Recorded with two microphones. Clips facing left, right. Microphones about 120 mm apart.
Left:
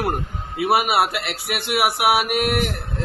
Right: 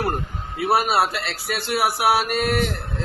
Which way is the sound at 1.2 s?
65° left (ahead or behind).